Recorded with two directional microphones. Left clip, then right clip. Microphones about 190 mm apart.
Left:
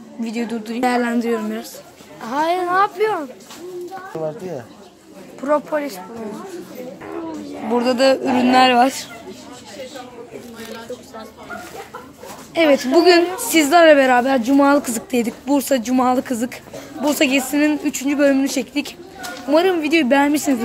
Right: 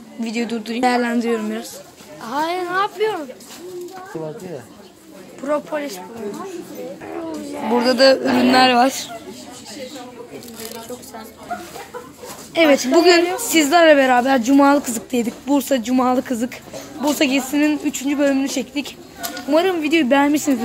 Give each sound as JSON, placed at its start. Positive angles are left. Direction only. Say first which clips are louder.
{"t": 0.2, "sound": "a woman's voice", "louder": "right 1 dB", "side_deg": -5}
{"t": 2.2, "sound": "speech", "louder": "left 3 dB", "side_deg": 25}
{"t": 5.4, "sound": "speech", "louder": "left 3 dB", "side_deg": 10}
{"t": 7.7, "sound": "a woman's voice", "louder": "right 2 dB", "side_deg": 0}
{"t": 12.6, "sound": "a woman's voice", "louder": "even", "side_deg": 0}